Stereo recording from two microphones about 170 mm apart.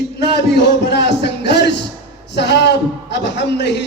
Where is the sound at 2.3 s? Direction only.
80° left.